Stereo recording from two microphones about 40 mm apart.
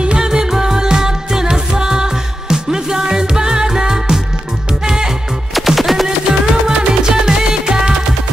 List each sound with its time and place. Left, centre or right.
0.0 s music: right
5.5 s music: centre
6.0 s music: centre